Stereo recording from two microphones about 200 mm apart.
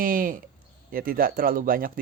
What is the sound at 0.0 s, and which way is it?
Speech, 45° right (ahead or behind).